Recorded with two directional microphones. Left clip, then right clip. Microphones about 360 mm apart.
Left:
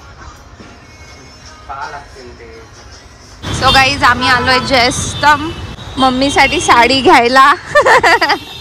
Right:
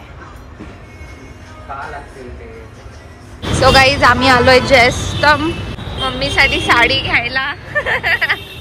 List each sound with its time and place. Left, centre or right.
3.5 s a woman's voice: centre